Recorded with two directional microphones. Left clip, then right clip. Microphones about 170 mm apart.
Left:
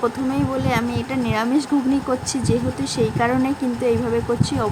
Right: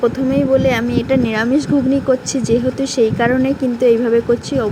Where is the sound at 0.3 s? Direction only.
10° right (ahead or behind).